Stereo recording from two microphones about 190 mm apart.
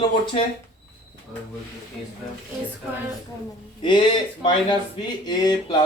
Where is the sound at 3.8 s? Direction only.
25° left (ahead or behind).